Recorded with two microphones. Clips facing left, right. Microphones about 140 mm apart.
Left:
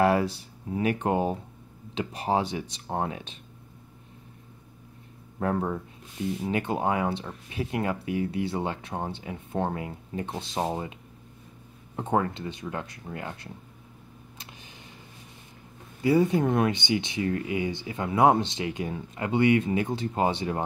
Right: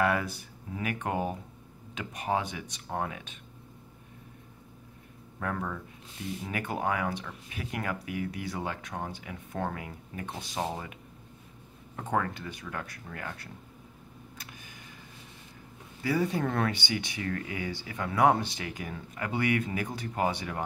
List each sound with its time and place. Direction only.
0.0 s speech: 30° left (ahead or behind)
5.4 s speech: 30° left (ahead or behind)
12.0 s speech: 25° left (ahead or behind)
16.0 s speech: 25° left (ahead or behind)